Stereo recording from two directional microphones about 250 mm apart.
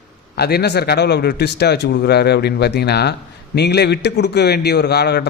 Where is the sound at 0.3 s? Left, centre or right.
Left.